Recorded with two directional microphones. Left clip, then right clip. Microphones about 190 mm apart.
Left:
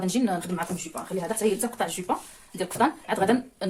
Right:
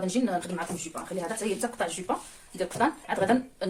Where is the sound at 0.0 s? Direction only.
45° left (ahead or behind).